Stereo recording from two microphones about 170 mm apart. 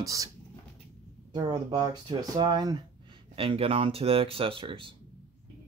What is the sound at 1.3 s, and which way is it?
Speech, 25° right (ahead or behind).